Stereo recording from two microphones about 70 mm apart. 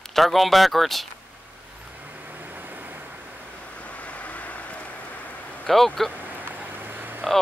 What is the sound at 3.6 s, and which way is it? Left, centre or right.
Waves, centre.